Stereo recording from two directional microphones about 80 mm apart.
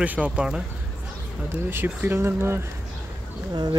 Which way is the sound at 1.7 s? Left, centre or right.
Right.